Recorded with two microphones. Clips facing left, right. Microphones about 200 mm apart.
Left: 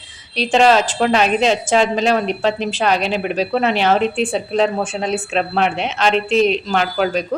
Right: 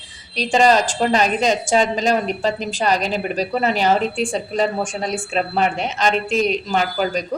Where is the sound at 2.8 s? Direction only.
40° right (ahead or behind).